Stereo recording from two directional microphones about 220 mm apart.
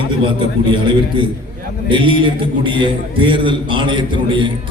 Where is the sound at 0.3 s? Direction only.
20° right (ahead or behind).